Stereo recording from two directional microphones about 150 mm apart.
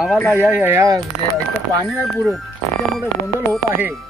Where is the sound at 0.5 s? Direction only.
15° right (ahead or behind).